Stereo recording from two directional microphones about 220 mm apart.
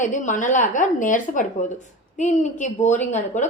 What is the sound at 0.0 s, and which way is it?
A woman's voice, 35° left (ahead or behind).